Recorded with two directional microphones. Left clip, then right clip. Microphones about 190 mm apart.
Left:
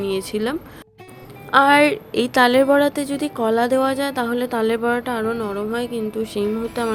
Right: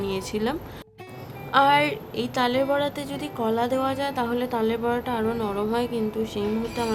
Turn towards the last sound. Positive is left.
turn(degrees=25)  # may be behind; listen again after turning